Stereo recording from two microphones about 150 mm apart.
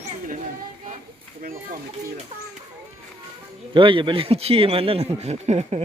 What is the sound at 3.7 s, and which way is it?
Speech, 35° right (ahead or behind).